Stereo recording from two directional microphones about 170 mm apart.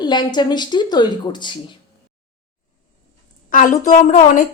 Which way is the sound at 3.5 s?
50° left (ahead or behind).